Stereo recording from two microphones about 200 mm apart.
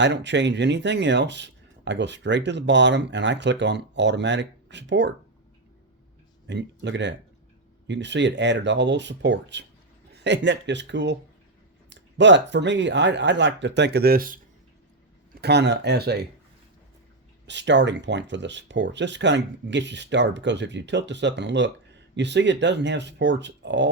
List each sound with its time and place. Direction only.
0.0 s speech: 60° right (ahead or behind)
6.5 s speech: 60° right (ahead or behind)
15.4 s speech: 55° right (ahead or behind)
17.4 s speech: 60° right (ahead or behind)